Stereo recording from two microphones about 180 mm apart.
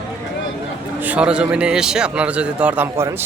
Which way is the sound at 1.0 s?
5° right (ahead or behind).